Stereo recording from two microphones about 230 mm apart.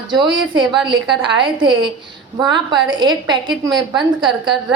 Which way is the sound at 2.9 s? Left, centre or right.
Centre.